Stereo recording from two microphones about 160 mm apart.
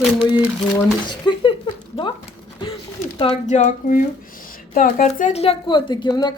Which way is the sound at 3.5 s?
50° left (ahead or behind).